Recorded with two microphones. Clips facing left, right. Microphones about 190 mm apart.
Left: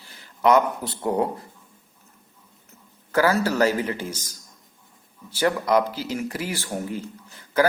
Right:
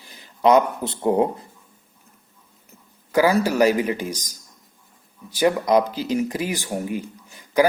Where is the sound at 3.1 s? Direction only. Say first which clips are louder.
Right 3 dB; 15° right (ahead or behind).